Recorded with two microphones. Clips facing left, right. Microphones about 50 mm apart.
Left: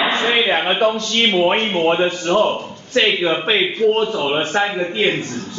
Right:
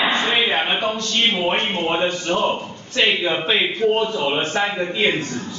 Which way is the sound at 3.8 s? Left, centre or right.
Right.